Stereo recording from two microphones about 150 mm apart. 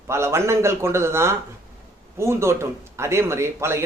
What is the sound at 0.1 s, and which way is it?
Speech, 20° right (ahead or behind).